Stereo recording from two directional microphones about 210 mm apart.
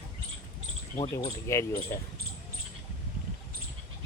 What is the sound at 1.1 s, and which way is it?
Speech, 15° left (ahead or behind).